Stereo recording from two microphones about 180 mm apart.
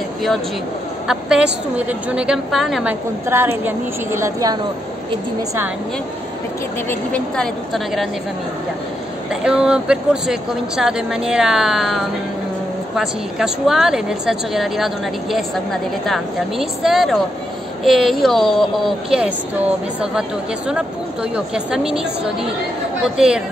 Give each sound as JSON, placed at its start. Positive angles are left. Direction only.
{"t": 1.0, "sound": "a woman's voice", "side_deg": -5}
{"t": 6.9, "sound": "speech", "side_deg": 5}
{"t": 9.3, "sound": "speech", "side_deg": -5}